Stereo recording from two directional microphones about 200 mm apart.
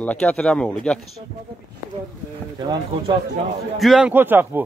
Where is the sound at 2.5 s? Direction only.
20° right (ahead or behind).